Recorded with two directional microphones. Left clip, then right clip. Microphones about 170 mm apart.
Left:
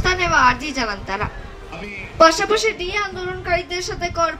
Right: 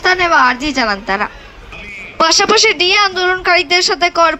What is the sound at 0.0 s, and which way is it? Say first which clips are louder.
A woman's voice: right 5 dB; 55° right (ahead or behind).